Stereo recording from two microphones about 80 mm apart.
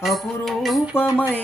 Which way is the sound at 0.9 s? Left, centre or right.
Left.